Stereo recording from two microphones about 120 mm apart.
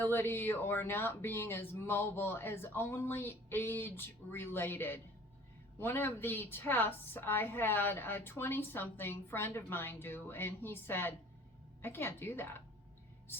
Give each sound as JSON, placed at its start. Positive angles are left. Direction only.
{"t": 0.0, "sound": "a woman's voice", "side_deg": 20}